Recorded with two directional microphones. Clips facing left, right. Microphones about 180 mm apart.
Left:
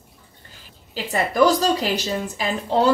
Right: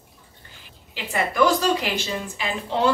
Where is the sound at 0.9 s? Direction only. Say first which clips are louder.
Left 3 dB; 40° left (ahead or behind).